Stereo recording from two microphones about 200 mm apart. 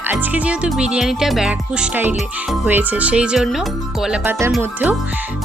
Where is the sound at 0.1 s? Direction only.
10° right (ahead or behind).